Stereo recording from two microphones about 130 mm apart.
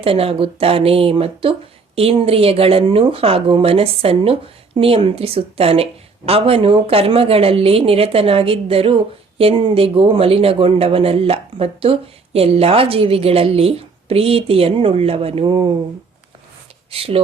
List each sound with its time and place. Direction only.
0.0 s speech: 45° right (ahead or behind)
16.9 s speech: 50° right (ahead or behind)